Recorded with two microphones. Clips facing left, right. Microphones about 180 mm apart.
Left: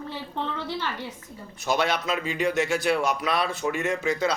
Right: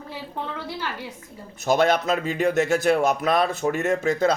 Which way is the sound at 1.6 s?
45° right (ahead or behind).